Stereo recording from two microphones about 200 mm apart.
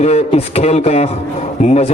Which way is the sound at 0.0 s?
30° left (ahead or behind).